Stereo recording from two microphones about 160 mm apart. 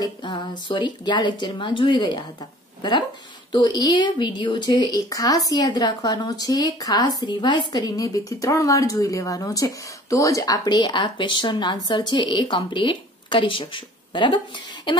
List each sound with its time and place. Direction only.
0.0 s a woman's voice: 30° left (ahead or behind)
3.5 s a woman's voice: 25° left (ahead or behind)